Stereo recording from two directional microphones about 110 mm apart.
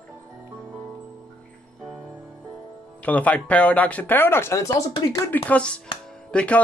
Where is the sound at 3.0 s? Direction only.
15° left (ahead or behind); by 5.2 s 35° left (ahead or behind).